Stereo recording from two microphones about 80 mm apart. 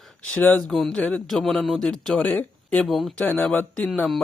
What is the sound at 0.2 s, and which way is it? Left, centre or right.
Speech, left.